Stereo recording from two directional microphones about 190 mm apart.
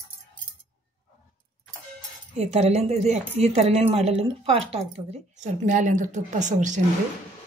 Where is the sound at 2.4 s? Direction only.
35° right (ahead or behind).